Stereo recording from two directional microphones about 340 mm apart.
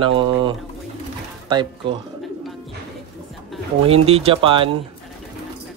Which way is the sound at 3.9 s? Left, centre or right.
Centre.